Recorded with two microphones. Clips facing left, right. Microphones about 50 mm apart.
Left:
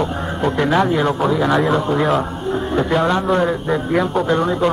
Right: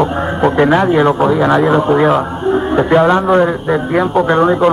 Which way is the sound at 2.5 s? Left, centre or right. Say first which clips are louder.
Right 6 dB; right.